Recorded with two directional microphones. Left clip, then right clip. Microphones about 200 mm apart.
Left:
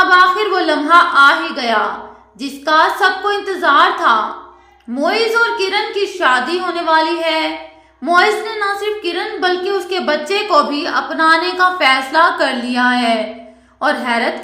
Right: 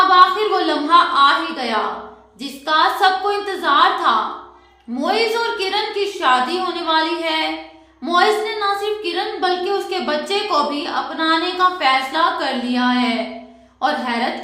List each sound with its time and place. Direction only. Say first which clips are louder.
0.1 s a woman's voice: left 2 dB; 20° left (ahead or behind)